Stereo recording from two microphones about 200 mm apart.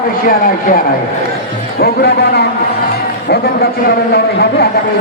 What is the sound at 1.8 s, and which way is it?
A man's voice, 55° left (ahead or behind).